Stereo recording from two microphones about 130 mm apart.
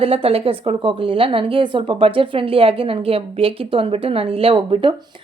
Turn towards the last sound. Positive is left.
turn(degrees=-45)  # may be behind; listen again after turning